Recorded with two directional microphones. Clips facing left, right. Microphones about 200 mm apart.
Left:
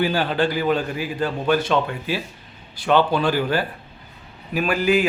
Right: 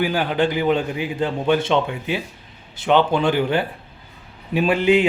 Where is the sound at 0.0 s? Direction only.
15° right (ahead or behind).